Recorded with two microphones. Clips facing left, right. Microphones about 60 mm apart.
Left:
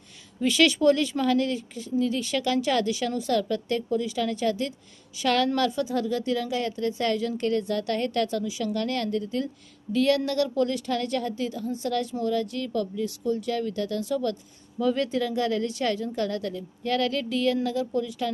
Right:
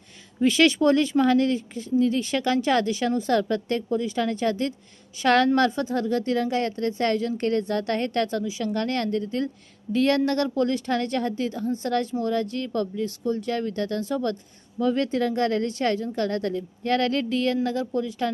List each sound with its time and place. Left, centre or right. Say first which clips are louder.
0.3 s speech: right 3 dB; right